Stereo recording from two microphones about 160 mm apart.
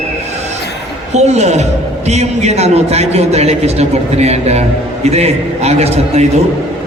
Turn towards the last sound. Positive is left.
turn(degrees=-40)  # may be behind; listen again after turning